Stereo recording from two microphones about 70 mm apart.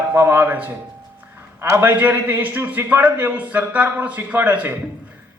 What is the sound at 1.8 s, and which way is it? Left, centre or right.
A man's voice, right.